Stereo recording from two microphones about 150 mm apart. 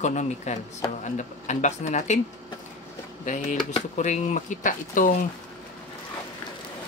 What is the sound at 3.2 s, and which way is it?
Speech, 55° left (ahead or behind).